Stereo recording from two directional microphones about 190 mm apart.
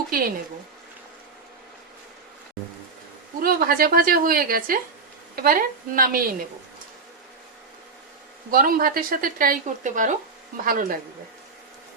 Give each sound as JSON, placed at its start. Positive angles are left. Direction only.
{"t": 0.1, "sound": "speech", "side_deg": -50}
{"t": 3.4, "sound": "speech", "side_deg": -50}
{"t": 8.4, "sound": "speech", "side_deg": -50}